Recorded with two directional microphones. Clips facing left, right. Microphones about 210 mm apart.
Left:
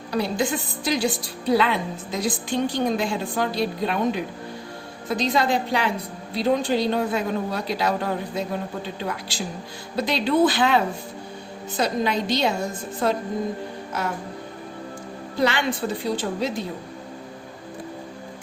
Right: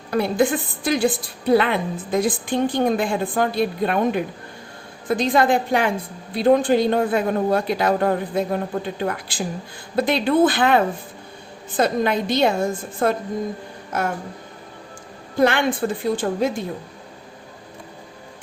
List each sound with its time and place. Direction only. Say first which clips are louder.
0.1 s a woman's voice: right 5 dB; 55° right (ahead or behind)
15.4 s a woman's voice: right 5 dB; 50° right (ahead or behind)